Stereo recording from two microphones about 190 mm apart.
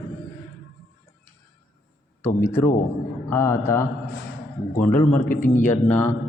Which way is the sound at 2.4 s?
10° left (ahead or behind).